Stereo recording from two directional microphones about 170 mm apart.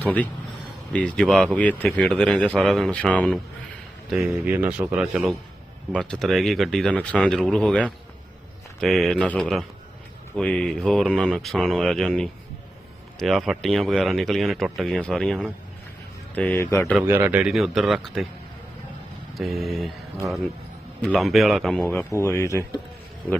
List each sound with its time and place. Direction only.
0.0 s a man's voice: 10° left (ahead or behind)
4.1 s a man's voice: 5° right (ahead or behind); by 16.8 s 15° left (ahead or behind)
17.1 s a man's voice: 10° right (ahead or behind)
19.3 s speech: centre (ahead or behind)
21.0 s a man's voice: 5° left (ahead or behind)